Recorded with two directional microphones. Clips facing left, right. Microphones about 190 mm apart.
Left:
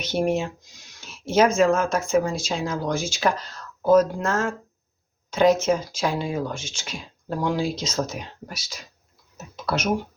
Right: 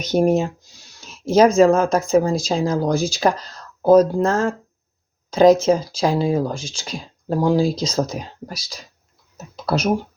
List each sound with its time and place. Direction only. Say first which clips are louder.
0.0 s speech: right 6 dB; 40° right (ahead or behind)